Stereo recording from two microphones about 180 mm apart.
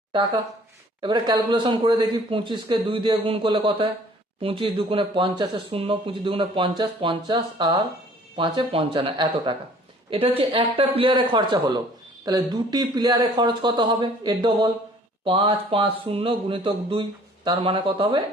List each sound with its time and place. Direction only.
0.1 s speech: 25° right (ahead or behind)